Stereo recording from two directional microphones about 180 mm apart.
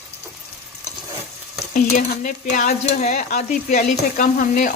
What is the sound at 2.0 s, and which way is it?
Stir, 45° left (ahead or behind).